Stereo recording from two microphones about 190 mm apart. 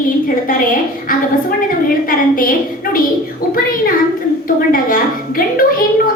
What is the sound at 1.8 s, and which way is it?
A woman's voice, 50° left (ahead or behind).